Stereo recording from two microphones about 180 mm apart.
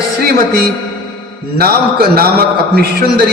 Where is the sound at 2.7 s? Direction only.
60° right (ahead or behind).